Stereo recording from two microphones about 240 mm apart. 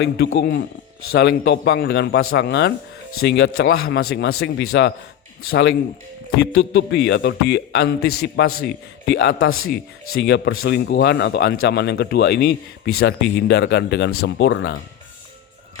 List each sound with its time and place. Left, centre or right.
0.0 s a man's voice: left